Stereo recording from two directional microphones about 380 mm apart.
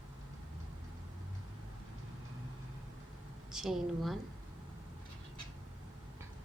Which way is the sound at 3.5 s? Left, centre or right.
Centre.